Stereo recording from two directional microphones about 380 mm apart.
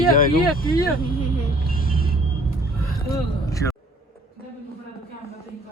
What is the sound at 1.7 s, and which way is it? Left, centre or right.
Vehicle, left.